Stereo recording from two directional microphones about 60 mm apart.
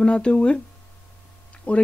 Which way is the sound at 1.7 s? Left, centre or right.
Centre.